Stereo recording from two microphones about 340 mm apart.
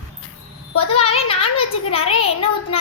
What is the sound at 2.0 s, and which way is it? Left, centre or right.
Speech, left.